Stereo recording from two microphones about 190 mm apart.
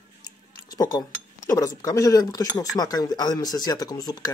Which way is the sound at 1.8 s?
20° left (ahead or behind).